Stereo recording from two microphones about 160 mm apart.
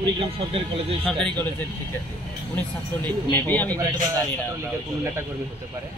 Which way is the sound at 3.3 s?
10° left (ahead or behind).